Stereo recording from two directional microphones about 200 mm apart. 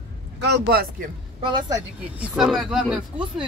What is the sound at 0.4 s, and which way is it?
Speech, 55° right (ahead or behind).